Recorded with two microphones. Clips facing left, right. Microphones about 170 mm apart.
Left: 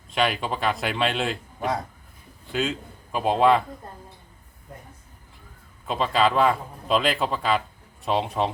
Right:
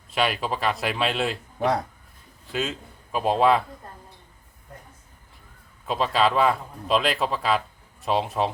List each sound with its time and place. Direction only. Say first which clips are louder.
0.1 s a man's voice: even; centre (ahead or behind)
1.5 s speech: right 5 dB; 70° right (ahead or behind)
2.5 s a man's voice: left 2 dB; centre (ahead or behind)
5.9 s a man's voice: even; centre (ahead or behind)